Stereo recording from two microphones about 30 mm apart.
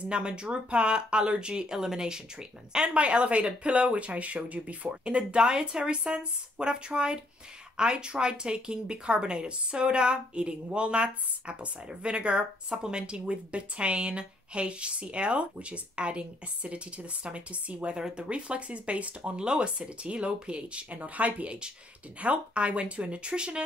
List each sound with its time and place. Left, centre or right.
0.4 s speech: right
2.9 s speech: right
5.1 s a woman's voice: right
20.9 s a woman's voice: right